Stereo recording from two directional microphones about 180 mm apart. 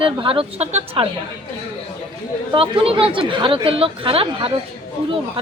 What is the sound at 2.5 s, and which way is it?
Speech, 30° right (ahead or behind).